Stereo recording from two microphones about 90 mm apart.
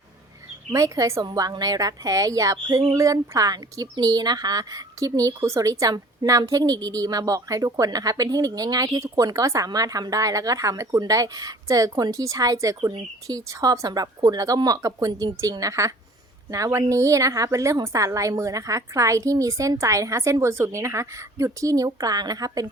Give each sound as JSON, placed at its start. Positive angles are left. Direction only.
{"t": 0.7, "sound": "a woman's voice", "side_deg": -35}
{"t": 1.2, "sound": "a woman's voice", "side_deg": -50}